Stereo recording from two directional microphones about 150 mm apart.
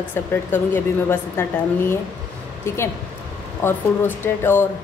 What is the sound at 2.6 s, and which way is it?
Speech, 15° left (ahead or behind).